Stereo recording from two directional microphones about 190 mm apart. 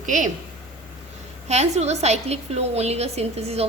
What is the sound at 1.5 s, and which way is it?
A woman's voice, 35° right (ahead or behind).